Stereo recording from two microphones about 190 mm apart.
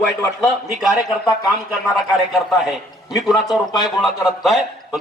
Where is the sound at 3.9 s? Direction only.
Centre (ahead or behind).